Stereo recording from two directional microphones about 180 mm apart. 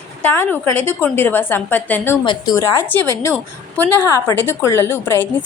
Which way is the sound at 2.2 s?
25° left (ahead or behind).